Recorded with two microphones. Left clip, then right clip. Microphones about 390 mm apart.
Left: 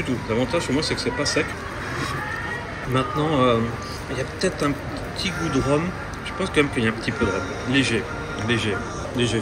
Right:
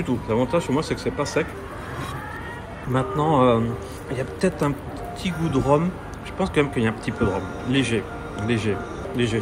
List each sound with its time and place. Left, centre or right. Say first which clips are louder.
0.3 s speech: right 1 dB; centre
2.9 s speech: right 1 dB; centre